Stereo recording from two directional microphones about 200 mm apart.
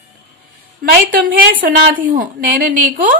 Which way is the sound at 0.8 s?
45° right (ahead or behind).